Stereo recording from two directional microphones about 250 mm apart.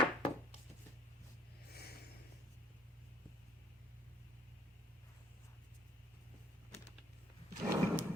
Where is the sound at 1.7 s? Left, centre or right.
Left.